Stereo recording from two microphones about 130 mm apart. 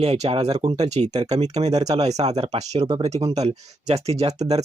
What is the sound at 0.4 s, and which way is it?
Speech, 30° right (ahead or behind).